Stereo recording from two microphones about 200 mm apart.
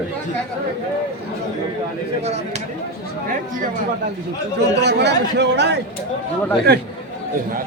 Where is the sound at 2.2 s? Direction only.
35° right (ahead or behind).